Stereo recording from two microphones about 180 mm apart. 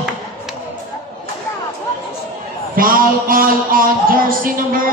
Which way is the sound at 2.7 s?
50° right (ahead or behind).